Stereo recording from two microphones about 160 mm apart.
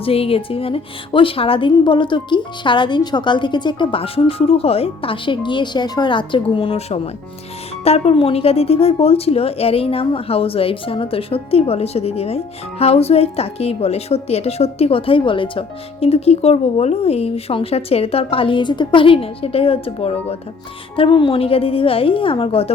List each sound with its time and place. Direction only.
0.0 s a woman's voice: 35° left (ahead or behind)